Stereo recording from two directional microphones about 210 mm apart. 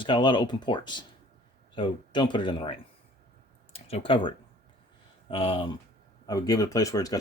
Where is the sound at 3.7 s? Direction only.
30° left (ahead or behind).